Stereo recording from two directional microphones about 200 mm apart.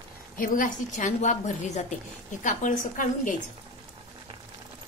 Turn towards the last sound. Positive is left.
turn(degrees=40)  # may be behind; listen again after turning